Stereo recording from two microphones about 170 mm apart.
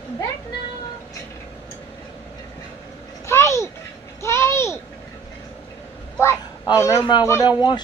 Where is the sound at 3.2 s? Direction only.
15° left (ahead or behind).